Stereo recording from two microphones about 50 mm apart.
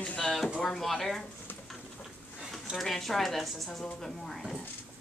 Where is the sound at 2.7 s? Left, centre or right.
Centre.